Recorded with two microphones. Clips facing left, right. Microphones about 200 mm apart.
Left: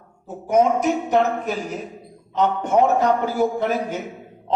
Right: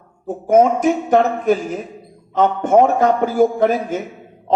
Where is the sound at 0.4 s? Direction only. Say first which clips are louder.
Right 4 dB; 50° right (ahead or behind).